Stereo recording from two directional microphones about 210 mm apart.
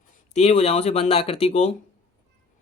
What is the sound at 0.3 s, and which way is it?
Speech, 30° left (ahead or behind).